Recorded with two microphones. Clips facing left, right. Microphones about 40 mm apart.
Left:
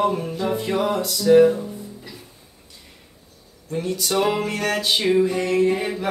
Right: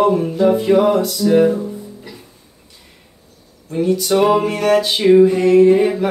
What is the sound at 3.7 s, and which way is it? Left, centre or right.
Music, centre.